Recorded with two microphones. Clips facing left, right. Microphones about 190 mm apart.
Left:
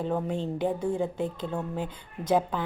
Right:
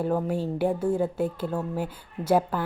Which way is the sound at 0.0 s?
5° right (ahead or behind).